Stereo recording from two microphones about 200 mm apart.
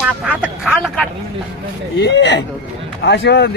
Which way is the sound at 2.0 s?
60° left (ahead or behind).